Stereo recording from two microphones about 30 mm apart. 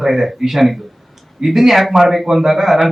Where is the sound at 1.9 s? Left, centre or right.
Centre.